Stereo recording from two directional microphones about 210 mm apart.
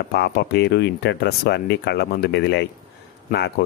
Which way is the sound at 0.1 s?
50° left (ahead or behind).